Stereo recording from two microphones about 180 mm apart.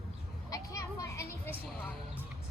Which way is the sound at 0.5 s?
20° left (ahead or behind).